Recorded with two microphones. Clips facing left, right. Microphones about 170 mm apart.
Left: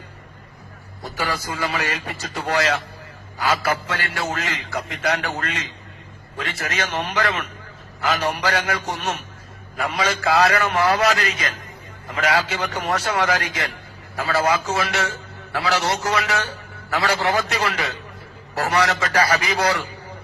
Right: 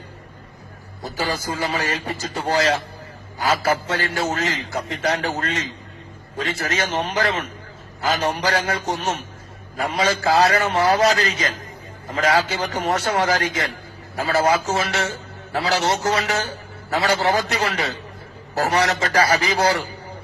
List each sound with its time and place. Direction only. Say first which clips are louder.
1.0 s a man's voice: right 1 dB; 35° right (ahead or behind)